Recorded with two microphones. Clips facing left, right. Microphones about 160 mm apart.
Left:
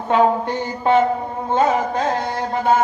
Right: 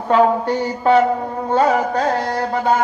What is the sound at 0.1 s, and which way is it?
Speech, 35° right (ahead or behind).